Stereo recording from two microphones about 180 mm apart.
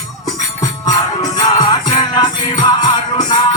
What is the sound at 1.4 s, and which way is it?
Music, 20° left (ahead or behind).